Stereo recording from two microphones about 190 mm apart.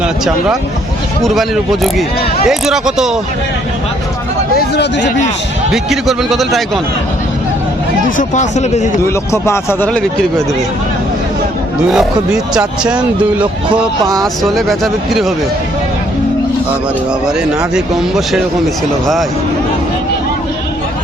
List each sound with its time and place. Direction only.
1.2 s speech: centre (ahead or behind)
4.5 s speech: 60° left (ahead or behind)
5.7 s speech: centre (ahead or behind)
8.4 s speech: 40° left (ahead or behind)
9.0 s speech: 15° left (ahead or behind)
11.8 s speech: 5° right (ahead or behind)
14.4 s speech: centre (ahead or behind)
17.2 s speech: 5° right (ahead or behind)